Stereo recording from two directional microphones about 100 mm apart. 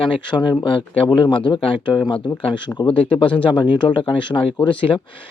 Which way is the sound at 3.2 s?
60° left (ahead or behind).